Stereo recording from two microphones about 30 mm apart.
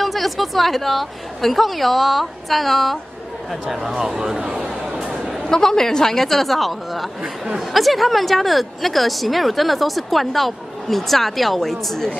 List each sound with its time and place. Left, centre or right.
0.0 s a woman's voice: centre
4.6 s chatter: centre
4.9 s a sound: right
5.5 s speech: centre